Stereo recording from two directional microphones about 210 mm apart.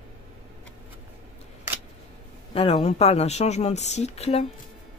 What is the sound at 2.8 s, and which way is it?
Speech, 30° left (ahead or behind).